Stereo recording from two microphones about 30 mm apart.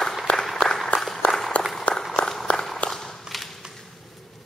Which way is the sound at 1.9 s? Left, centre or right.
Left.